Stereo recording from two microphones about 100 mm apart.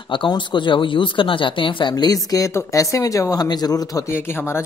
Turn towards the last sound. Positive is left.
turn(degrees=25)  # may be behind; listen again after turning